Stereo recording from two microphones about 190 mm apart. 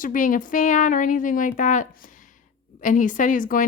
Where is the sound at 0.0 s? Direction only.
45° left (ahead or behind).